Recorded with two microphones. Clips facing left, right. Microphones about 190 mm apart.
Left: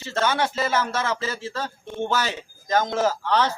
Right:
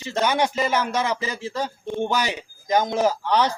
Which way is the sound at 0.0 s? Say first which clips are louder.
Right 2 dB; 15° right (ahead or behind).